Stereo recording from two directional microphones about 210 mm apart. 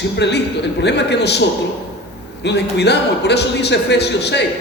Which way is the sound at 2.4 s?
55° left (ahead or behind).